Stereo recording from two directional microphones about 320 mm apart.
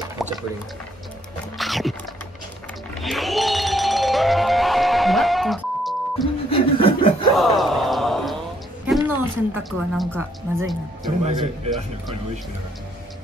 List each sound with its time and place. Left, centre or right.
0.2 s liquid: centre
1.6 s speech: centre
2.9 s music: centre
6.5 s chuckle: centre
7.3 s a sound: centre
9.6 s speech: centre
11.2 s a man's voice: centre